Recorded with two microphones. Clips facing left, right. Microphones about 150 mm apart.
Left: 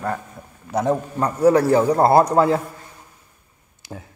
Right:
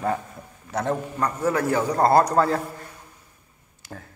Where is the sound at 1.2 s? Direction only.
35° left (ahead or behind).